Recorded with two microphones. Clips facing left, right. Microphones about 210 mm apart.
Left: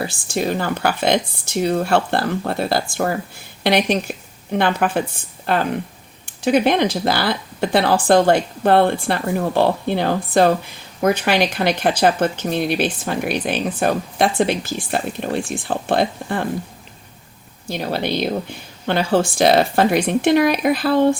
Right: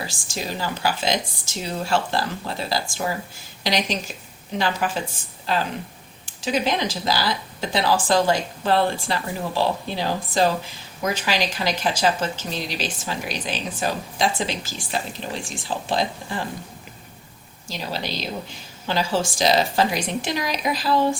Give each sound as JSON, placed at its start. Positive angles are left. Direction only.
{"t": 0.0, "sound": "speech", "side_deg": 60}
{"t": 17.7, "sound": "speech", "side_deg": 60}